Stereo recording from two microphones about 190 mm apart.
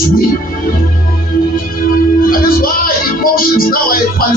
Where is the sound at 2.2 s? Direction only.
50° left (ahead or behind).